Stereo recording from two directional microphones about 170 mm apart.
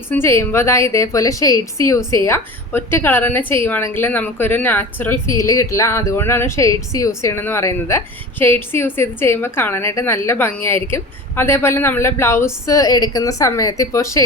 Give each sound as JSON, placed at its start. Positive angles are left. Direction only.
{"t": 0.1, "sound": "a woman's voice", "side_deg": 15}